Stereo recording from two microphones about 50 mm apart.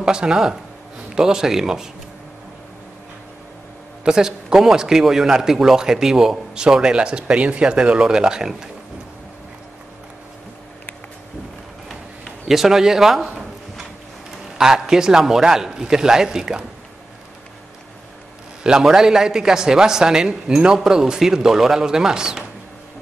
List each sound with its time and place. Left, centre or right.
0.0 s a man's voice: centre
4.0 s a man's voice: centre
11.9 s a sound: centre
14.6 s a man's voice: centre
18.6 s a man's voice: centre